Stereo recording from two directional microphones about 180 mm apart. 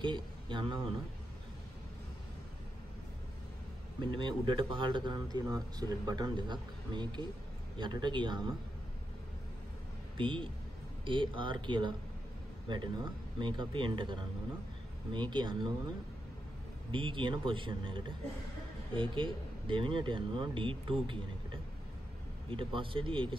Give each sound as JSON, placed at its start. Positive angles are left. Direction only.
{"t": 0.0, "sound": "a man's voice", "side_deg": -25}
{"t": 4.0, "sound": "speech", "side_deg": -25}
{"t": 10.1, "sound": "speech", "side_deg": -30}
{"t": 16.9, "sound": "speech", "side_deg": -25}
{"t": 22.5, "sound": "speech", "side_deg": -30}